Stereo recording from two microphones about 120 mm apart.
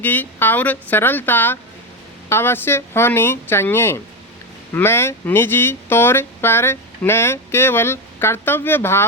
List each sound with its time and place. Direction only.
0.0 s speech: 15° left (ahead or behind)